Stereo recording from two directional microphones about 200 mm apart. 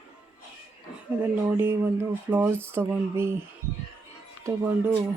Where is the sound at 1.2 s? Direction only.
10° right (ahead or behind).